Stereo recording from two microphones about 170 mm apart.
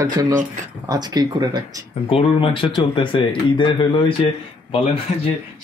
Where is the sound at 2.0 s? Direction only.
30° left (ahead or behind).